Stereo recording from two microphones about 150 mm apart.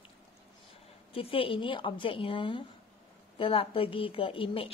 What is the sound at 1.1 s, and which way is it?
A woman's voice, 40° left (ahead or behind).